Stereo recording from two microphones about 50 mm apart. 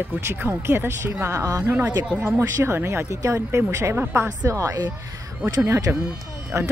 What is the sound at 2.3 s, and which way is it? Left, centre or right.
Speech, right.